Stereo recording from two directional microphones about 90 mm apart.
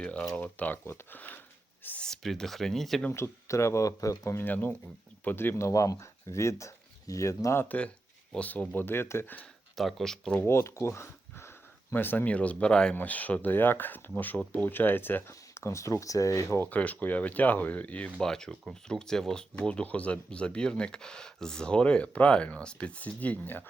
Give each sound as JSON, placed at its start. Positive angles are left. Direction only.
{"t": 0.0, "sound": "speech", "side_deg": 10}
{"t": 1.8, "sound": "a sound", "side_deg": 20}
{"t": 2.0, "sound": "speech", "side_deg": 5}
{"t": 3.1, "sound": "speech", "side_deg": 35}
{"t": 4.4, "sound": "speech", "side_deg": 20}
{"t": 8.3, "sound": "speech", "side_deg": 15}
{"t": 9.7, "sound": "speech", "side_deg": 5}
{"t": 10.4, "sound": "speech", "side_deg": 30}
{"t": 16.6, "sound": "speech", "side_deg": 15}